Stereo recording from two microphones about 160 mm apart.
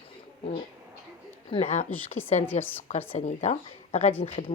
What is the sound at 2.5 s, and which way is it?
Speech, 15° left (ahead or behind).